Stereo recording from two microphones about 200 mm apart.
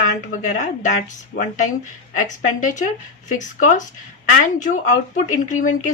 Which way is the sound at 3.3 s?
40° left (ahead or behind).